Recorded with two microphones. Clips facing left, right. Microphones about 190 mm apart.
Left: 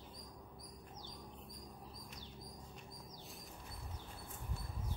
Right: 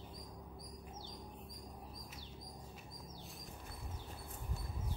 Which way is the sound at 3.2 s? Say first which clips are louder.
Right 1 dB; centre (ahead or behind).